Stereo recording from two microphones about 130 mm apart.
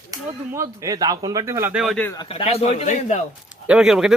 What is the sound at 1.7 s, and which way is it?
Speech, centre (ahead or behind).